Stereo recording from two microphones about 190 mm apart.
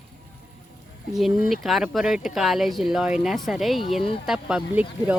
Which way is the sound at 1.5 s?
Centre (ahead or behind).